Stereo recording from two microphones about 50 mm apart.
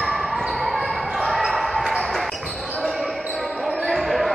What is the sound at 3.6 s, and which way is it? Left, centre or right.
Basketball bounce, centre.